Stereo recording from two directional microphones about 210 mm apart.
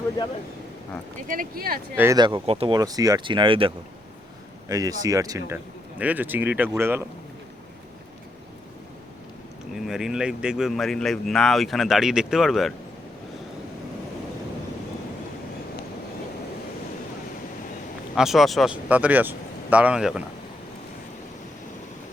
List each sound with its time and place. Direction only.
1.3 s speech: 45° right (ahead or behind)
2.0 s speech: 15° right (ahead or behind)
4.7 s speech: 15° right (ahead or behind)
9.7 s speech: centre (ahead or behind)
18.1 s speech: centre (ahead or behind)